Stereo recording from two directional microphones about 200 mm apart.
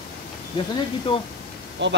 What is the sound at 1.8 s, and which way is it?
Speech, 60° right (ahead or behind).